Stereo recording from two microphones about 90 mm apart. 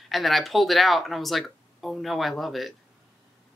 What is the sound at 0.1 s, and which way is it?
A man's voice, centre (ahead or behind).